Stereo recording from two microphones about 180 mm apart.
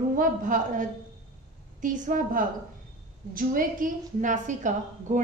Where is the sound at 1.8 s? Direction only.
45° right (ahead or behind).